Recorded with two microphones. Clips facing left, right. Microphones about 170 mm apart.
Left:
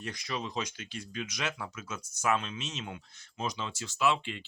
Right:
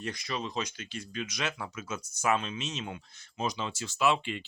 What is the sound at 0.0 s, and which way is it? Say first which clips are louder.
Speech: right 2 dB; 10° left (ahead or behind).